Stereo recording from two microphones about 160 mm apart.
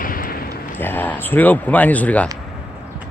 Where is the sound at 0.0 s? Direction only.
60° left (ahead or behind).